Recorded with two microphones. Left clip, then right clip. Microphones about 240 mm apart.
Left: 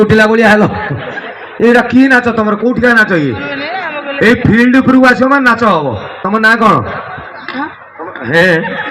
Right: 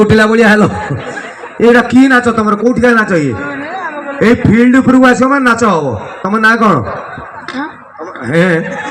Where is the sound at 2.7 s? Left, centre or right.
Right.